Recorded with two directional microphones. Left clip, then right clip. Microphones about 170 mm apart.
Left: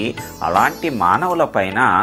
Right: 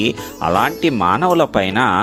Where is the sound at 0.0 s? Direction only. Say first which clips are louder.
Right 3 dB; 50° right (ahead or behind).